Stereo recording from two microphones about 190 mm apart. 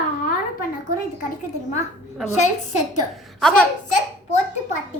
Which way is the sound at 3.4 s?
5° left (ahead or behind).